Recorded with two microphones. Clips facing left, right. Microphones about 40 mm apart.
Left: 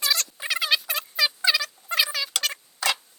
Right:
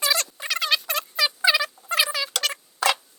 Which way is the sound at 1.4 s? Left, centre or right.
Centre.